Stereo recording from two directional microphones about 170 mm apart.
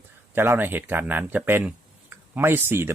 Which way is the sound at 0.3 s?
15° right (ahead or behind).